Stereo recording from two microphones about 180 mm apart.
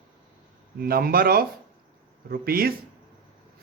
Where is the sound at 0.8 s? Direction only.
55° right (ahead or behind).